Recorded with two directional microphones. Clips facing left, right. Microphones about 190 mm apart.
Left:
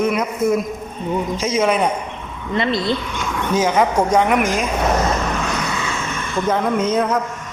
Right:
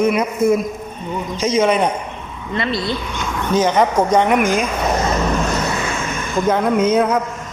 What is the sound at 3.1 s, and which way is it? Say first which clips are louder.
Speech: right 1 dB; 5° left (ahead or behind).